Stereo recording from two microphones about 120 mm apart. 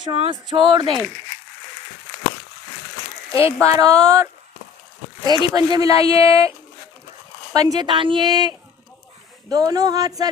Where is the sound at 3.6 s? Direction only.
30° right (ahead or behind).